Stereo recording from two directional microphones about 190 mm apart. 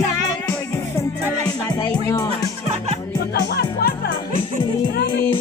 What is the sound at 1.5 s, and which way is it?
Music, 20° left (ahead or behind).